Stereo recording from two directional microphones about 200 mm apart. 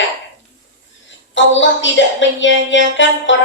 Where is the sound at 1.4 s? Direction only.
65° left (ahead or behind).